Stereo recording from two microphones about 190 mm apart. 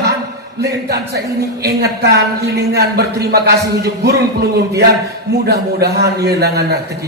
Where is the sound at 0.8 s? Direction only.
60° right (ahead or behind).